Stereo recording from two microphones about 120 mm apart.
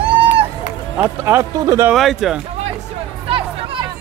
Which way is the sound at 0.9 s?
20° right (ahead or behind).